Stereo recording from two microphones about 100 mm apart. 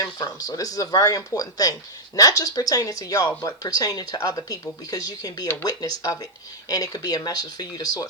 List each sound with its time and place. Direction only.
0.0 s speech: 40° left (ahead or behind)
6.7 s speech: 40° left (ahead or behind)